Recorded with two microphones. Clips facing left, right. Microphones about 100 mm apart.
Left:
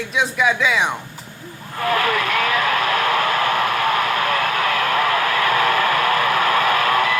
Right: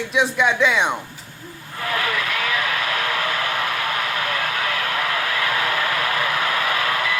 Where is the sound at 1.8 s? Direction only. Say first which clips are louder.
Left 5 dB; 45° left (ahead or behind).